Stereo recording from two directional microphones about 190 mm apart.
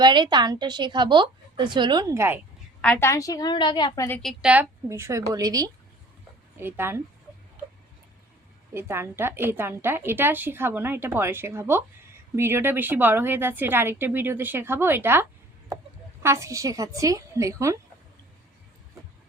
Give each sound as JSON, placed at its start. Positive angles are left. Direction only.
{"t": 0.0, "sound": "a woman's voice", "side_deg": -25}
{"t": 2.8, "sound": "a woman's voice", "side_deg": 10}
{"t": 4.2, "sound": "a woman's voice", "side_deg": 0}
{"t": 8.7, "sound": "a woman's voice", "side_deg": -10}